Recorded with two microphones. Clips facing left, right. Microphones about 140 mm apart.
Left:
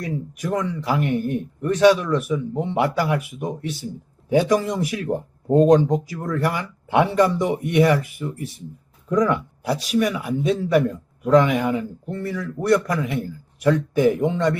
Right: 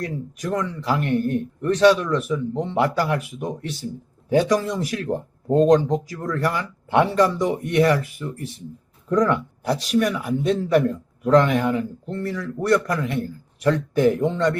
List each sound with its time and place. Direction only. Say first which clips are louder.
0.1 s a man's voice: left 1 dB; 15° left (ahead or behind)